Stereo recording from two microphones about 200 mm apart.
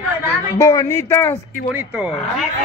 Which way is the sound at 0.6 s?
15° left (ahead or behind).